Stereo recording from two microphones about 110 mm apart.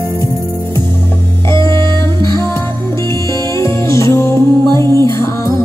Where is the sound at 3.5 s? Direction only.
25° left (ahead or behind).